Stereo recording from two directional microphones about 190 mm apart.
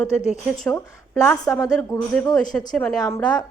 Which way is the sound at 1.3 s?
15° left (ahead or behind).